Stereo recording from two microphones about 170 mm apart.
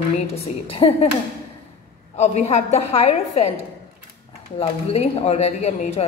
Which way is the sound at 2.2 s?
40° left (ahead or behind).